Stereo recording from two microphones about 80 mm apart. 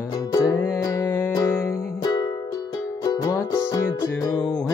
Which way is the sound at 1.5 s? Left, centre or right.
Left.